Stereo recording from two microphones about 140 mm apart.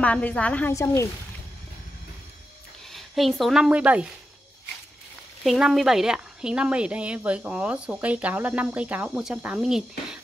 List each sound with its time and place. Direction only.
0.0 s a woman's voice: 10° left (ahead or behind)
0.7 s speech: 20° left (ahead or behind)
2.9 s a woman's voice: centre (ahead or behind)
5.4 s speech: centre (ahead or behind)